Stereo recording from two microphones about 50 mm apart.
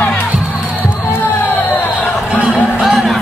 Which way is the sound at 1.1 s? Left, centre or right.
Left.